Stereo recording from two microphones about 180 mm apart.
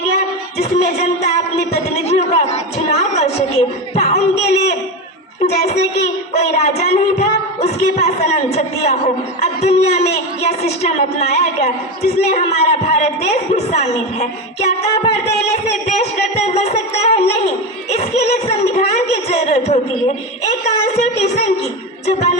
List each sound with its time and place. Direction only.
0.6 s speech: 35° left (ahead or behind)
1.7 s music: 40° left (ahead or behind)
5.5 s a child's voice: 40° left (ahead or behind)